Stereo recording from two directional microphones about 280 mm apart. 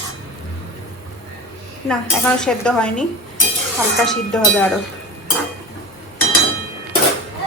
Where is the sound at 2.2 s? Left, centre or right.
Centre.